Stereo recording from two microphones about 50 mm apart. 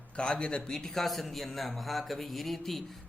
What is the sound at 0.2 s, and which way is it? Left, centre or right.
Speech, centre.